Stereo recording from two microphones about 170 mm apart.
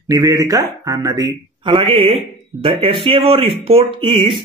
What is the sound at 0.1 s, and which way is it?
Speech, 20° right (ahead or behind).